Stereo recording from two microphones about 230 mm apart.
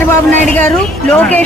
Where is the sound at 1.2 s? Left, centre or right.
Centre.